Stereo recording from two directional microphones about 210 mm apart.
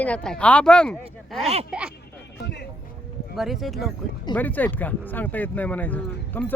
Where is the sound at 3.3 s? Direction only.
Centre (ahead or behind).